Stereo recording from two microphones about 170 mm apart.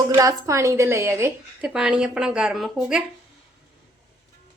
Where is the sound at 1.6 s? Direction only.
5° right (ahead or behind).